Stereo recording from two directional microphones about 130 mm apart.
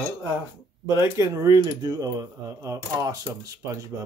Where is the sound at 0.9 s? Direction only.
20° right (ahead or behind).